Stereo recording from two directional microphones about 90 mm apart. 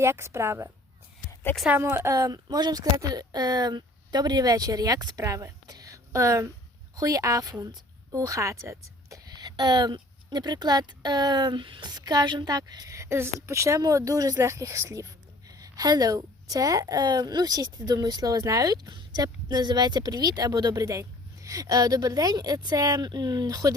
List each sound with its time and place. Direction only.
0.0 s a woman's voice: 30° right (ahead or behind)
1.3 s a sound: 25° left (ahead or behind)
2.0 s a woman's voice: 35° right (ahead or behind)